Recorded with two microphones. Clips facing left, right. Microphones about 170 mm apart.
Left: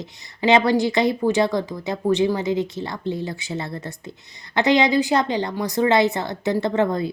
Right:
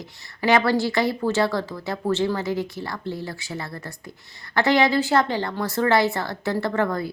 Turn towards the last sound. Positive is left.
turn(degrees=20)  # may be behind; listen again after turning